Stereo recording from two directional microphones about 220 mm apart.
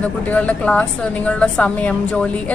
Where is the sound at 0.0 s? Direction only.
5° left (ahead or behind).